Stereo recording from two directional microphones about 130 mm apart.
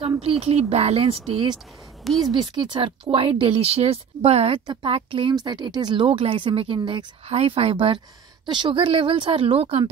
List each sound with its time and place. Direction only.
0.2 s speech: 50° right (ahead or behind)
2.0 s speech: centre (ahead or behind)
2.3 s speech: 35° right (ahead or behind)
7.2 s speech: 50° right (ahead or behind)